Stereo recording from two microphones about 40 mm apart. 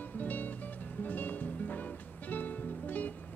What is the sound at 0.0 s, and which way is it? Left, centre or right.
Music, left.